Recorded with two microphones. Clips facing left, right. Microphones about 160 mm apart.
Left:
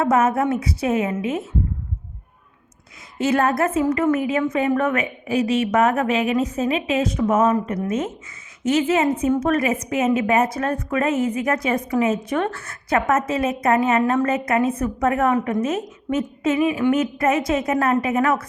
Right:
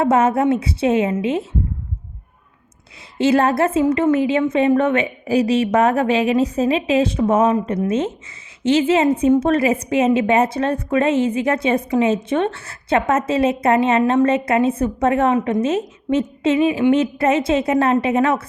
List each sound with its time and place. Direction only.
0.0 s a woman's voice: 30° right (ahead or behind)
3.2 s a woman's voice: 30° right (ahead or behind)